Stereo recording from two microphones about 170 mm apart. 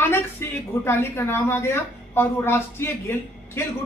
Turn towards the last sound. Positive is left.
turn(degrees=15)  # may be behind; listen again after turning